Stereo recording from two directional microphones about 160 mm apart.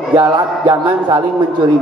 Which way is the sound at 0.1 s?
30° right (ahead or behind).